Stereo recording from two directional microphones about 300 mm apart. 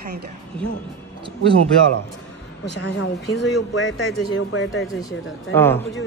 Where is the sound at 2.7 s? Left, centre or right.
Left.